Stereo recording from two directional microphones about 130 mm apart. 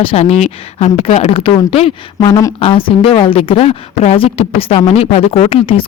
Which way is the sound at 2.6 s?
45° left (ahead or behind).